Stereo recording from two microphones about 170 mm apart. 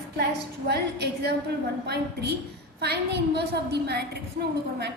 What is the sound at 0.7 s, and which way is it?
Speech, 75° right (ahead or behind).